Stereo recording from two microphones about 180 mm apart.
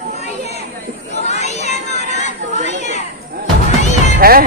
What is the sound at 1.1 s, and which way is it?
Children playing, 40° left (ahead or behind).